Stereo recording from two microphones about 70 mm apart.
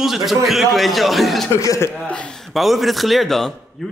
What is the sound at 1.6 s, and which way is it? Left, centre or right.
Speech, left.